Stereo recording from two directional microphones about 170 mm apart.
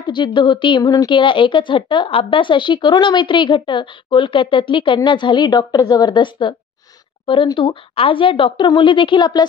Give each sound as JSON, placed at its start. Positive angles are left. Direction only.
{"t": 0.0, "sound": "a woman's voice", "side_deg": 25}